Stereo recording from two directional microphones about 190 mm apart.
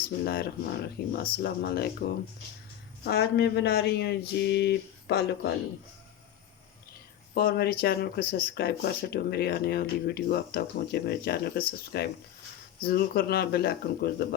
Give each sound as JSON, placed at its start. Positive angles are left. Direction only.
{"t": 0.0, "sound": "speech", "side_deg": 55}
{"t": 7.3, "sound": "speech", "side_deg": 55}